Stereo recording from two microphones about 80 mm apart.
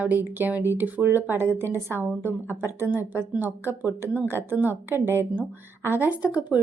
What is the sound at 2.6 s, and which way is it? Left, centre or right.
Speech, right.